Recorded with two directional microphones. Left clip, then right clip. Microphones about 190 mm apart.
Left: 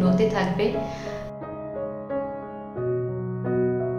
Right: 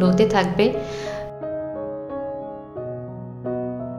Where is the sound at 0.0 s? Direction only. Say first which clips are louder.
Right 5 dB; 40° right (ahead or behind).